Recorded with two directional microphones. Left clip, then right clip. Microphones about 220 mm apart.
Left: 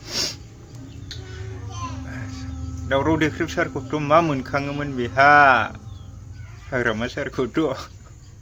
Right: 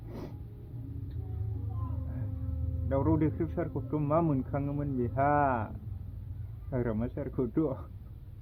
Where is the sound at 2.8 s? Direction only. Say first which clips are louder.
Left 10 dB; 15° left (ahead or behind).